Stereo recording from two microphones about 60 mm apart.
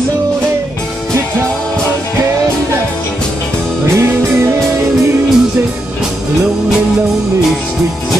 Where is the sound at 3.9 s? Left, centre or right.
Right.